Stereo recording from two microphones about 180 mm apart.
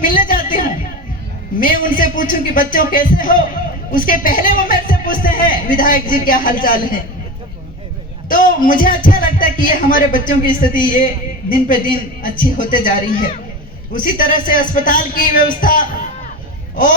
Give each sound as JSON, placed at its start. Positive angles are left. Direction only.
{"t": 0.0, "sound": "music", "side_deg": 50}
{"t": 1.5, "sound": "speech", "side_deg": 50}
{"t": 8.3, "sound": "a man's voice", "side_deg": 50}